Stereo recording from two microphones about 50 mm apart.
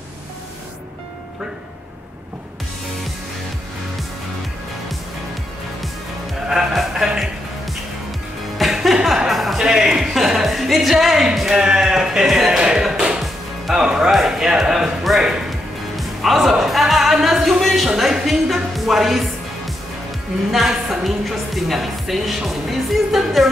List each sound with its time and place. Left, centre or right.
6.5 s music: centre
9.6 s music: centre
12.3 s a sound: centre
12.5 s music: centre
14.1 s a sound: centre
16.0 s music: centre
20.5 s music: centre